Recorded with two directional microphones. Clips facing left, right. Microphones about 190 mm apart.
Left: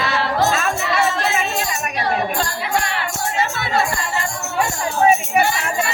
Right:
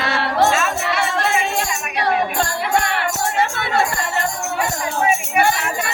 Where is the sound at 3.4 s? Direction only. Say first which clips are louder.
Even; 60° right (ahead or behind).